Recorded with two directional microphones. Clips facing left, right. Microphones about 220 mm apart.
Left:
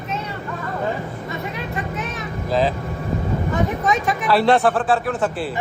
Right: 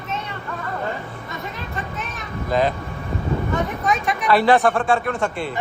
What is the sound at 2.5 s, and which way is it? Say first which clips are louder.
Speech: even; centre (ahead or behind).